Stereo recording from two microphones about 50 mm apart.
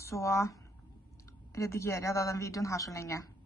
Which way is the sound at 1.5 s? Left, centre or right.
Left.